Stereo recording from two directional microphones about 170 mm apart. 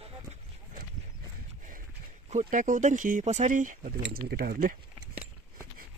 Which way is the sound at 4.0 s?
65° right (ahead or behind).